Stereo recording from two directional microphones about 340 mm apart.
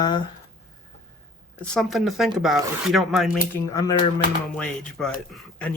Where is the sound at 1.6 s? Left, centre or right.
Centre.